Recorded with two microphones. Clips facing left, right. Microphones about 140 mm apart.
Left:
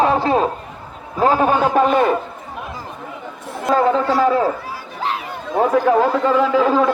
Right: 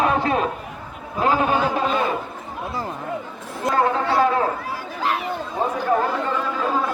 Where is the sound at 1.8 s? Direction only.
55° left (ahead or behind).